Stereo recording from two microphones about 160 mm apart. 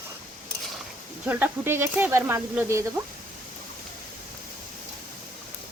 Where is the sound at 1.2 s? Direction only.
10° right (ahead or behind).